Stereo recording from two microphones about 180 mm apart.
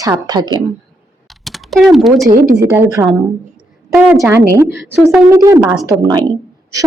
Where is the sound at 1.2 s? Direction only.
Centre (ahead or behind).